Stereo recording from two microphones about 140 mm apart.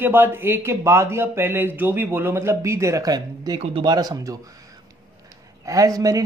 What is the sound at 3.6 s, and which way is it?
Speech, 40° right (ahead or behind).